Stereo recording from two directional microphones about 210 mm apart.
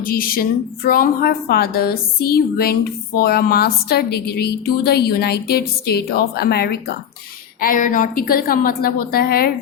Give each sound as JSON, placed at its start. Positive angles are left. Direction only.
{"t": 0.0, "sound": "a woman's voice", "side_deg": 45}